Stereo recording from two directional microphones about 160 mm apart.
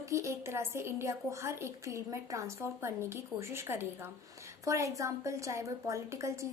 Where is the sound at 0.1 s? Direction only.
20° right (ahead or behind).